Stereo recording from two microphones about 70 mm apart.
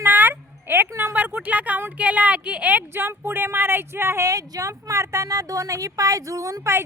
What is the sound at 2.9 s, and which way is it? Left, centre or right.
Speech, right.